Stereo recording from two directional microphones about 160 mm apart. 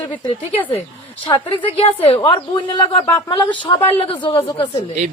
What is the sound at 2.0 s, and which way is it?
Speech, 35° left (ahead or behind).